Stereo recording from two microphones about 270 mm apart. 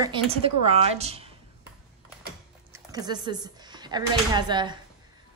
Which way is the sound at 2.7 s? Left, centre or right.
Centre.